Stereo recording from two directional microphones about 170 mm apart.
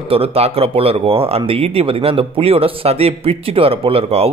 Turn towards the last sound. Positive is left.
turn(degrees=-35)  # may be behind; listen again after turning